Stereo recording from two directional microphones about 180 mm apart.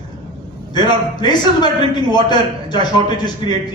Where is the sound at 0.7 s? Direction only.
25° left (ahead or behind).